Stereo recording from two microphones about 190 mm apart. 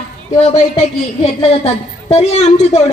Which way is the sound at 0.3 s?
35° left (ahead or behind).